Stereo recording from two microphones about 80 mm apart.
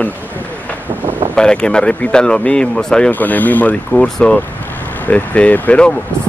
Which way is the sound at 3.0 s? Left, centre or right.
Left.